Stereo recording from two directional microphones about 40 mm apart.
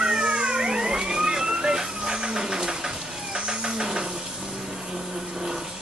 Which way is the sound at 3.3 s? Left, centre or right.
Right.